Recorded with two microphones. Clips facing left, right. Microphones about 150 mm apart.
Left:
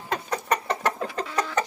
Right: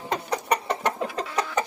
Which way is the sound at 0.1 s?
15° right (ahead or behind).